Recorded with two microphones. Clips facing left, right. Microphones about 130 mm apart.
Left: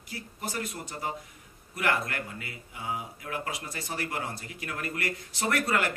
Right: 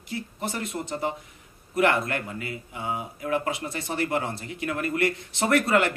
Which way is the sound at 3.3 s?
25° right (ahead or behind).